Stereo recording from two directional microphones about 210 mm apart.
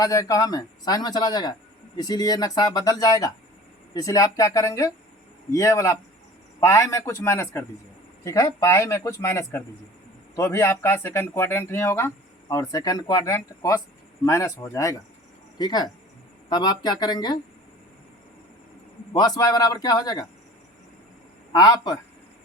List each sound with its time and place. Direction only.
0.0 s a man's voice: 15° left (ahead or behind)
19.1 s a man's voice: 20° left (ahead or behind)
21.5 s speech: 20° left (ahead or behind)